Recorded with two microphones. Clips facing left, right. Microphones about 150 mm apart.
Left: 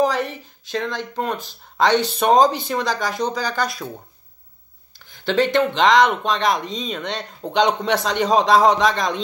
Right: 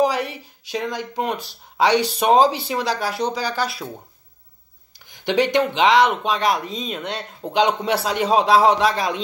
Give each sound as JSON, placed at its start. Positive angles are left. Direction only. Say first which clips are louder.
{"t": 0.0, "sound": "speech", "louder": "even", "side_deg": -10}
{"t": 4.9, "sound": "speech", "louder": "even", "side_deg": -15}